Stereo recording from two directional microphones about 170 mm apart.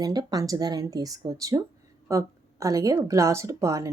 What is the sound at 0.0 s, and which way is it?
A woman's voice, 25° right (ahead or behind).